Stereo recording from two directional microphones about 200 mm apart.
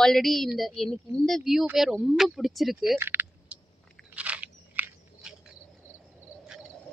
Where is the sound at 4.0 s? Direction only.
5° right (ahead or behind).